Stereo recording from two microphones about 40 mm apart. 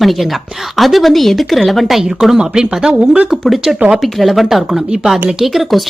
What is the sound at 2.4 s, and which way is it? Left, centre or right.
Speech, centre.